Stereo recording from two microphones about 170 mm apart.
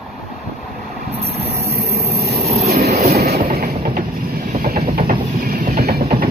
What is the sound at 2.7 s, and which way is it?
Vehicle, 40° right (ahead or behind).